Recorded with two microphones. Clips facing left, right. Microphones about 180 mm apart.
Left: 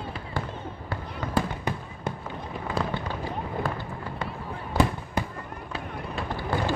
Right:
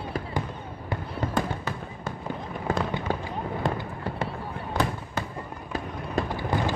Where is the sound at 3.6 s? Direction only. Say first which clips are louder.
Right 2 dB; 25° right (ahead or behind).